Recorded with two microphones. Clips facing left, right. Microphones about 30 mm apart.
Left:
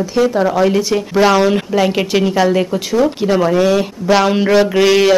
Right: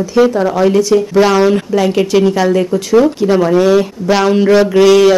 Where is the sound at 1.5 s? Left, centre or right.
Centre.